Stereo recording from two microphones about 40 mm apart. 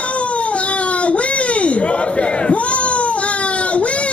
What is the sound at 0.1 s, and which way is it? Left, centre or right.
Baby cry, left.